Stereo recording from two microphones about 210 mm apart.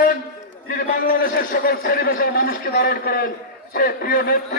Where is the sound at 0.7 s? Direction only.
45° left (ahead or behind).